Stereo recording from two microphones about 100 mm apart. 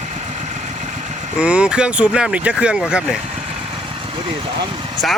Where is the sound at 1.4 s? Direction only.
10° right (ahead or behind).